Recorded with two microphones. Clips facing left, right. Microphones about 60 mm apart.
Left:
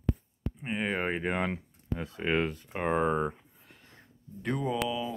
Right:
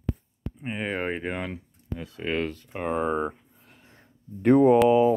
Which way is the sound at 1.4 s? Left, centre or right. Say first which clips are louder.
Left 2 dB; centre.